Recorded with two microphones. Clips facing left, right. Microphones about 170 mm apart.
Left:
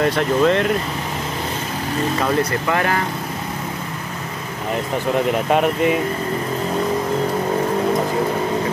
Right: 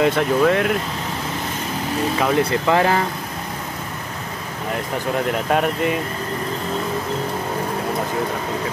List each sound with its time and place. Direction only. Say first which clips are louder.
0.0 s speech: even; 5° right (ahead or behind)
2.7 s speech: right 4 dB; 20° right (ahead or behind)
5.5 s speech: left 2 dB; 5° left (ahead or behind)